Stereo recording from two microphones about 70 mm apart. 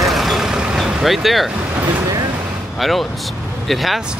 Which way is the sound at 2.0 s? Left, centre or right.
Right.